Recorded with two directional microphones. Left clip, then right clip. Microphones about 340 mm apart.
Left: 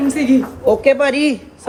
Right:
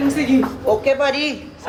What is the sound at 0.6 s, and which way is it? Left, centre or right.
Speech, left.